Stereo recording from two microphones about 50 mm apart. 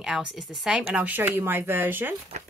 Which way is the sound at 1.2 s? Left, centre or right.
Right.